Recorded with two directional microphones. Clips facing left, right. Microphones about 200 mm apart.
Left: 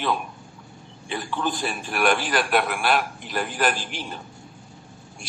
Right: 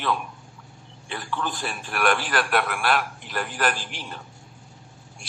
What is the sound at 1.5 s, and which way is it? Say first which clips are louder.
Speech: left 3 dB; 20° left (ahead or behind).